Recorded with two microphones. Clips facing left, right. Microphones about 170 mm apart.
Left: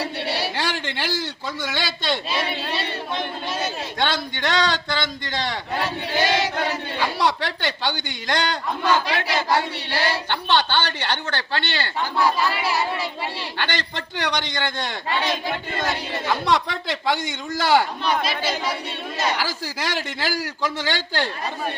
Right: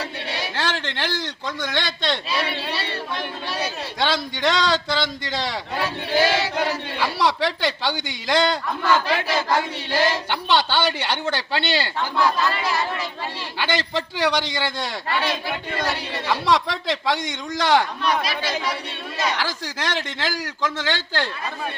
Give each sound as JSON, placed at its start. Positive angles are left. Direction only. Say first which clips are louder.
{"t": 0.5, "sound": "speech", "louder": "even", "side_deg": 10}
{"t": 2.3, "sound": "battle cry", "louder": "even", "side_deg": 25}
{"t": 3.6, "sound": "a man's voice", "louder": "right 1 dB", "side_deg": 0}
{"t": 6.2, "sound": "a man's voice", "louder": "left 3 dB", "side_deg": 15}
{"t": 6.6, "sound": "a man's voice", "louder": "right 1 dB", "side_deg": 0}
{"t": 8.8, "sound": "a man's voice", "louder": "even", "side_deg": 15}
{"t": 10.2, "sound": "speech", "louder": "even", "side_deg": -10}
{"t": 11.9, "sound": "a man's voice", "louder": "left 3 dB", "side_deg": 5}
{"t": 13.6, "sound": "a man's voice", "louder": "right 5 dB", "side_deg": -5}
{"t": 16.2, "sound": "a man's voice", "louder": "right 1 dB", "side_deg": 0}
{"t": 18.0, "sound": "speech", "louder": "even", "side_deg": 25}
{"t": 19.3, "sound": "a man's voice", "louder": "left 1 dB", "side_deg": 5}